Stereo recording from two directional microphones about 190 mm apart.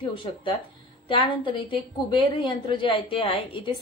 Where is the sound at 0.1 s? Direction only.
25° left (ahead or behind).